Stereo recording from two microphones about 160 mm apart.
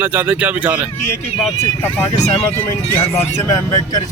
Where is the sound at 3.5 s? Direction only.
20° left (ahead or behind).